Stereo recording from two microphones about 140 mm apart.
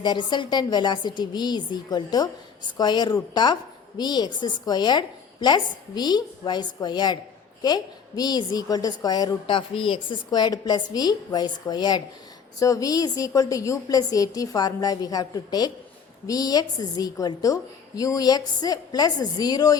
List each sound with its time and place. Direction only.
0.0 s a woman's voice: 30° left (ahead or behind)